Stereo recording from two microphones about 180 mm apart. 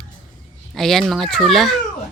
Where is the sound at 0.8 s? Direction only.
Centre (ahead or behind).